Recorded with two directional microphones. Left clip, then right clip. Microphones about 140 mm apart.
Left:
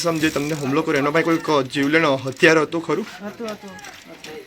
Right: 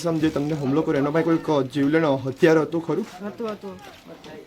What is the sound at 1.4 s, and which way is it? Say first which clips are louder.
Speech: left 3 dB; 30° right (ahead or behind).